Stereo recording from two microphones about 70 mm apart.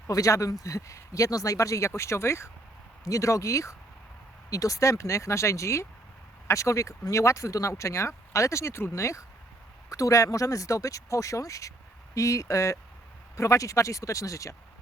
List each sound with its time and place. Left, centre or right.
0.1 s speech: left